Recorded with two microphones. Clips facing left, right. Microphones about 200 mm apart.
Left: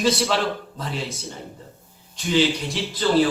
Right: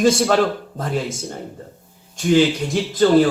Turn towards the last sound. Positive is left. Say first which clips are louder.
# right 6 dB
turn(degrees=-50)  # may be behind; listen again after turning